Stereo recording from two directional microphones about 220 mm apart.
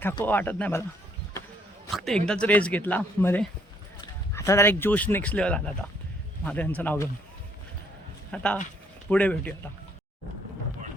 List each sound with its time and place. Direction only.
0.3 s speech: 10° left (ahead or behind)
1.9 s speech: centre (ahead or behind)
8.3 s speech: 5° left (ahead or behind)